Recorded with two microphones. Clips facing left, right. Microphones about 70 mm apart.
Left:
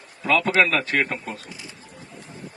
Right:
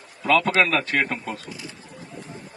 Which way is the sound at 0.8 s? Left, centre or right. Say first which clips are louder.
Even; left.